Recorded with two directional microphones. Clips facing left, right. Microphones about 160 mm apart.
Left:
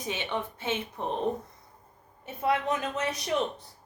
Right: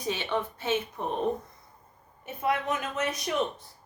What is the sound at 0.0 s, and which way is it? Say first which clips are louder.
Speech: right 2 dB; 20° left (ahead or behind).